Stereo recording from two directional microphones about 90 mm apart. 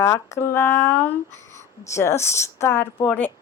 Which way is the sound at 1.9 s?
30° left (ahead or behind).